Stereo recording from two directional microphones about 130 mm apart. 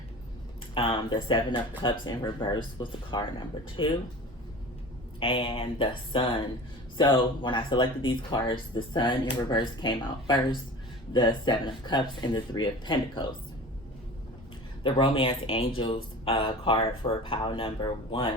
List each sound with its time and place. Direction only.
0.7 s speech: 40° left (ahead or behind)
5.2 s speech: 45° left (ahead or behind)
14.8 s speech: 40° left (ahead or behind)